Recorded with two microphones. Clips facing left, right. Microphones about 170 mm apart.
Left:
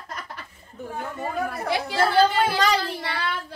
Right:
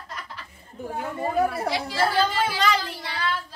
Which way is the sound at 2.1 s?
35° left (ahead or behind).